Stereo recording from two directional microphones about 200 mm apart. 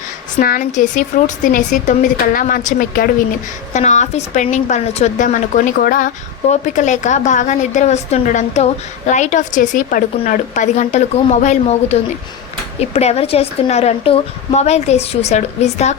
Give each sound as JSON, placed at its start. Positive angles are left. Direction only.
{"t": 0.3, "sound": "a woman's voice", "side_deg": 45}